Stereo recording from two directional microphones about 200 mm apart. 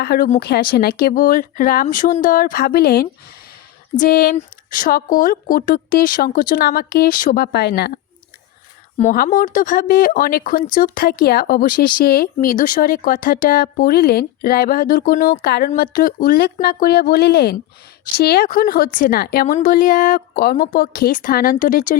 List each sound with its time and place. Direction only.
0.0 s speech: 50° left (ahead or behind)
9.0 s speech: 40° left (ahead or behind)